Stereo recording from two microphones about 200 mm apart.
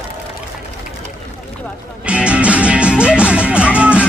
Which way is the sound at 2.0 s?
5° right (ahead or behind).